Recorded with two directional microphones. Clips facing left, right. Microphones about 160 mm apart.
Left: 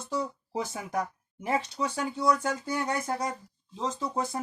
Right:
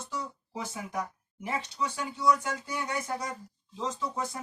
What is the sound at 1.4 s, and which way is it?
Speech, 40° left (ahead or behind).